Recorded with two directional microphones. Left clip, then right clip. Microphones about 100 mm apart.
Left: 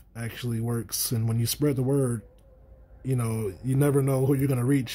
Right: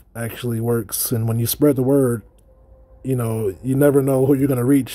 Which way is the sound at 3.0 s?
25° right (ahead or behind).